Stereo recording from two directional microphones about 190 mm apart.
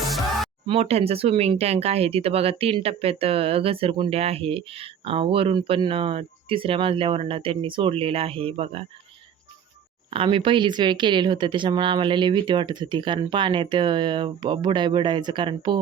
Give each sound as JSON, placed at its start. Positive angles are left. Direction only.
{"t": 0.1, "sound": "music", "side_deg": 0}
{"t": 0.7, "sound": "speech", "side_deg": -30}
{"t": 10.1, "sound": "speech", "side_deg": -25}